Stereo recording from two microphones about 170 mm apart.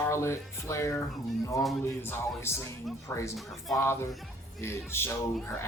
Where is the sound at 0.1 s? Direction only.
15° left (ahead or behind).